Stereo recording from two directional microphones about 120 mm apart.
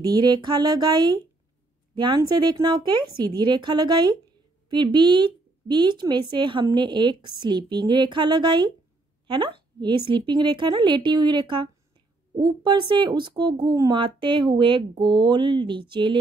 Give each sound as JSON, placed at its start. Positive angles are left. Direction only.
{"t": 0.0, "sound": "speech", "side_deg": -35}